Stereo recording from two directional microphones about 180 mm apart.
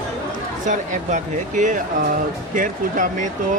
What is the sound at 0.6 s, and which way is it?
Speech, 45° right (ahead or behind).